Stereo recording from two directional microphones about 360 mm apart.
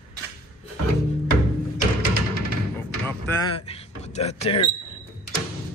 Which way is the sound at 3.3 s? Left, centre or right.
Centre.